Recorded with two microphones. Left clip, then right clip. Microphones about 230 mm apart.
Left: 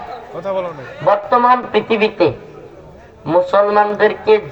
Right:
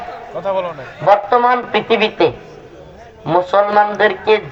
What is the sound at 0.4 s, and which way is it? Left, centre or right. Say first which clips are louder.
A man's voice: right 2 dB; left.